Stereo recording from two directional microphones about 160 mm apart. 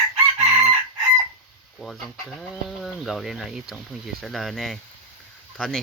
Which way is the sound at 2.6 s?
Centre (ahead or behind).